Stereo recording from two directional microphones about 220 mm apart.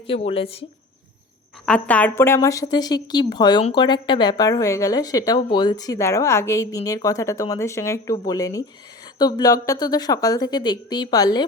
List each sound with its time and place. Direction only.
0.1 s speech: 25° left (ahead or behind)
1.6 s a woman's voice: 5° left (ahead or behind)